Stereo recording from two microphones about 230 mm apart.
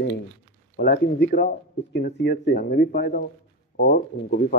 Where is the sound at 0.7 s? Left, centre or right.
Left.